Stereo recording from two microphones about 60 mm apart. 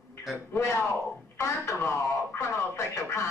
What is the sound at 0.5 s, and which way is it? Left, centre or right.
Speech, left.